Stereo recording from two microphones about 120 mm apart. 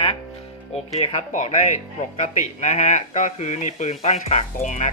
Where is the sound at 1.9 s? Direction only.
70° left (ahead or behind).